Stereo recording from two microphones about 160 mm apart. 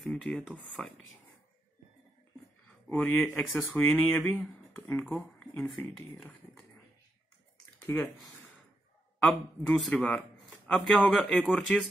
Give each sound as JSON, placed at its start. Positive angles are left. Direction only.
{"t": 0.0, "sound": "speech", "side_deg": 5}
{"t": 3.0, "sound": "speech", "side_deg": 5}
{"t": 7.8, "sound": "speech", "side_deg": 15}
{"t": 9.2, "sound": "speech", "side_deg": 5}